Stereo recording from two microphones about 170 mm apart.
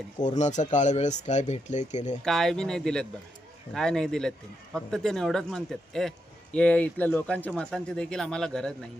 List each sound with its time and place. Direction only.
0.2 s speech: 45° left (ahead or behind)
2.2 s speech: centre (ahead or behind)